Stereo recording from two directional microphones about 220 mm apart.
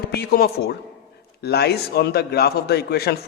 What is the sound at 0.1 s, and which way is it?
A man's voice, 45° left (ahead or behind).